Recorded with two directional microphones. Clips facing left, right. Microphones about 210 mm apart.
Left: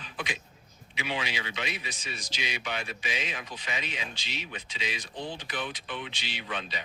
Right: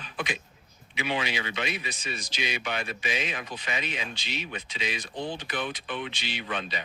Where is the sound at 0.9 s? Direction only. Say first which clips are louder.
Right 4 dB; 55° right (ahead or behind).